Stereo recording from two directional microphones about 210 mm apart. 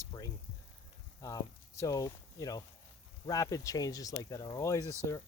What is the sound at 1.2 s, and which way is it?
Speech, 15° left (ahead or behind).